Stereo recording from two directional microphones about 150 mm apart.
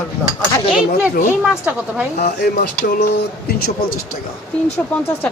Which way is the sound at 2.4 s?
90° left.